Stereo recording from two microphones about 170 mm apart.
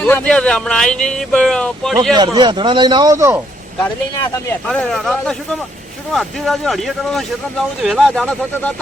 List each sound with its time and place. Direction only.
0.0 s speech: 5° left (ahead or behind)
2.1 s a man's voice: 25° right (ahead or behind)
4.6 s speech: 5° left (ahead or behind)